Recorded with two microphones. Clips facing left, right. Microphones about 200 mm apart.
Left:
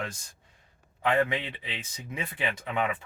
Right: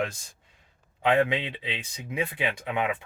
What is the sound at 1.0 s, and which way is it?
Speech, 20° right (ahead or behind).